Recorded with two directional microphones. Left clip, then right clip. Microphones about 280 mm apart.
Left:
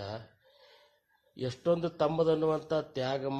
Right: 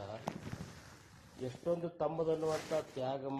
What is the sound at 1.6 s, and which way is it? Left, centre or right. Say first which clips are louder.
Speech: left 7 dB; left.